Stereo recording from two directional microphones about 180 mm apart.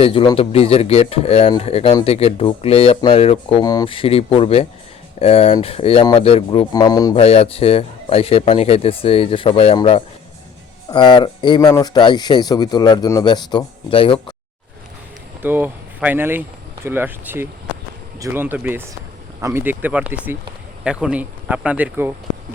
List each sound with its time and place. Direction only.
0.0 s speech: 30° left (ahead or behind)
3.6 s speech: 20° left (ahead or behind)
7.2 s speech: 35° left (ahead or behind)
15.4 s speech: 10° right (ahead or behind)